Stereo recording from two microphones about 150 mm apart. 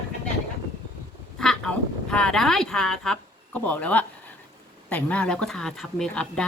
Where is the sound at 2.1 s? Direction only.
5° left (ahead or behind).